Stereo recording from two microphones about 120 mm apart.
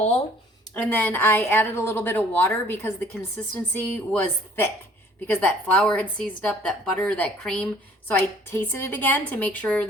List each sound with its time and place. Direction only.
0.7 s a woman's voice: 15° left (ahead or behind)